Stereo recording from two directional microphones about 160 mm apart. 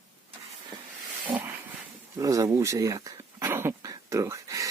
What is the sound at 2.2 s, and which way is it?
Speech, 20° right (ahead or behind).